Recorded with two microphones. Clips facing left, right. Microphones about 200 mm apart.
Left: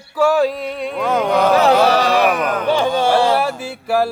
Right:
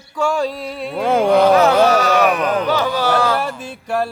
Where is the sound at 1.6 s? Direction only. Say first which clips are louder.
Even; 35° left (ahead or behind).